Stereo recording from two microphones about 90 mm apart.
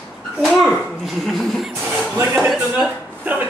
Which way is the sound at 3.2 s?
20° right (ahead or behind).